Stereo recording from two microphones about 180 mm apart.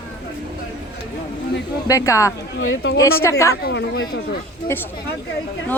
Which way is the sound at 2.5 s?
90° left.